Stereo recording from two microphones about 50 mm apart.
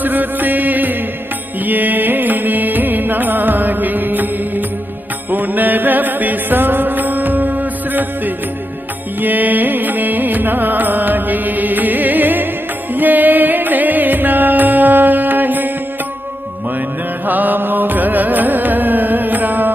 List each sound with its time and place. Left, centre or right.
0.0 s music: right
17.2 s music: right